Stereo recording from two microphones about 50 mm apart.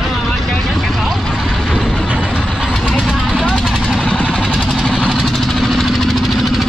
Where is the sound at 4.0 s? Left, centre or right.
Centre.